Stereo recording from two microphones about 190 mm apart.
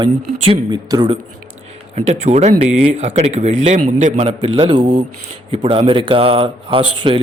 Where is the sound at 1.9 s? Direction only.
35° right (ahead or behind).